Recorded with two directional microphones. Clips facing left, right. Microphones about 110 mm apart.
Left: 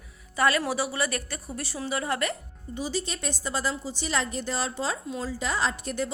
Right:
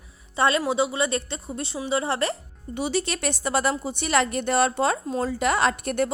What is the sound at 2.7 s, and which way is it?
A woman's voice, 70° right (ahead or behind).